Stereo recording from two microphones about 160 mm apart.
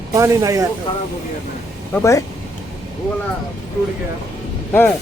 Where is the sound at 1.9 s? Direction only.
20° left (ahead or behind).